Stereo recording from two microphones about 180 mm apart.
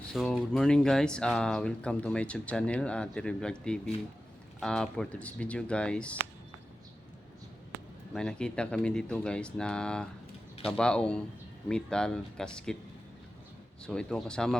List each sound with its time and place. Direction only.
0.1 s speech: 5° left (ahead or behind)
8.1 s speech: 5° left (ahead or behind)
13.8 s speech: 5° left (ahead or behind)